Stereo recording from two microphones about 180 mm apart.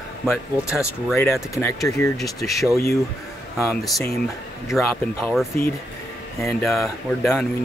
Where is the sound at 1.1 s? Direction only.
15° left (ahead or behind).